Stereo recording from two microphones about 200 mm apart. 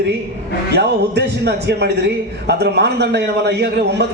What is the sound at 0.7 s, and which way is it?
A man's voice, 55° right (ahead or behind).